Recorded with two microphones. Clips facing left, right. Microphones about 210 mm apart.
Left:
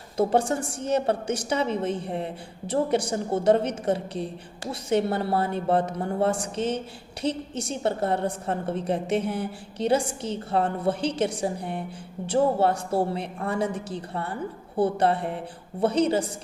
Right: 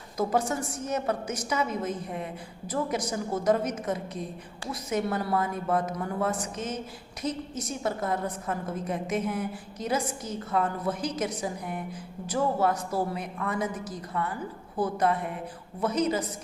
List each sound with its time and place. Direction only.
0.2 s a woman's voice: 30° left (ahead or behind)